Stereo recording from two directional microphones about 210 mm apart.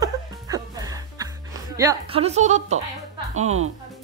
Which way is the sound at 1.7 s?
15° right (ahead or behind).